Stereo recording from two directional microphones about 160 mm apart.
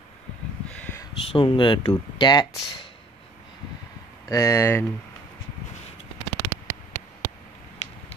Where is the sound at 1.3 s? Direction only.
35° left (ahead or behind).